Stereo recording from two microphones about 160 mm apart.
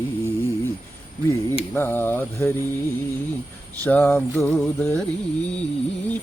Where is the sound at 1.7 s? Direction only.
15° left (ahead or behind).